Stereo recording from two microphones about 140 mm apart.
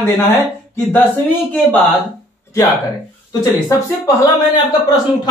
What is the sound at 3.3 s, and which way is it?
Speech, 25° left (ahead or behind).